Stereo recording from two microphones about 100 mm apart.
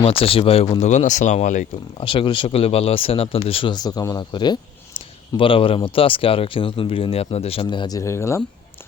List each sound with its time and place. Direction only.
0.0 s speech: 70° left (ahead or behind)
2.0 s speech: 60° left (ahead or behind)
3.7 s speech: 40° left (ahead or behind)
4.9 s speech: 60° left (ahead or behind)
7.9 s speech: 30° left (ahead or behind)